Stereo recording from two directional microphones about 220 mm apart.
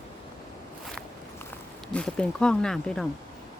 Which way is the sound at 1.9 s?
5° left (ahead or behind).